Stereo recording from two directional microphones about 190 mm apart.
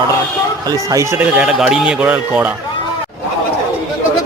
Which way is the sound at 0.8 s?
15° right (ahead or behind).